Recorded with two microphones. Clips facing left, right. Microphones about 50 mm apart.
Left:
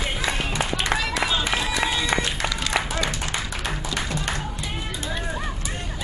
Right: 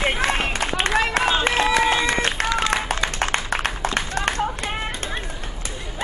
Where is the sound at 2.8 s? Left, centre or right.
Right.